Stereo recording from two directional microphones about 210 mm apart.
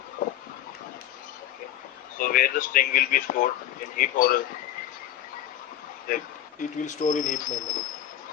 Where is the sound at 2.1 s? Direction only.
40° left (ahead or behind).